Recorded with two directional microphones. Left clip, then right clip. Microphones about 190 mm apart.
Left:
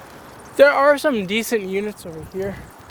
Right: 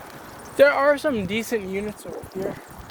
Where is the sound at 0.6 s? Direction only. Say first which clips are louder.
Left 4 dB; 35° left (ahead or behind); by 1.9 s 55° left (ahead or behind).